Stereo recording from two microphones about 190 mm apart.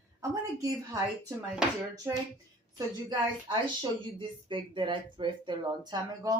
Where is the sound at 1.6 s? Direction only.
5° right (ahead or behind).